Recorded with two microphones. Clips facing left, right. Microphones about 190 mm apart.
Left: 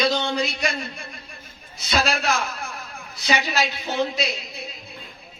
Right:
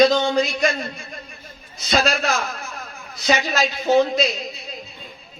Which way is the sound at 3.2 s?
55° right (ahead or behind).